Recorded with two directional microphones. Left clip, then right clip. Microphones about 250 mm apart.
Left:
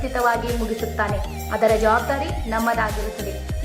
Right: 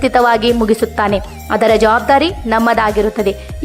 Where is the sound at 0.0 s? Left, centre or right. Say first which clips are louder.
Right 10 dB; right.